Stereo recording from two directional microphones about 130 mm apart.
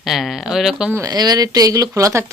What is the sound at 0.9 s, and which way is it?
Speech, 25° right (ahead or behind).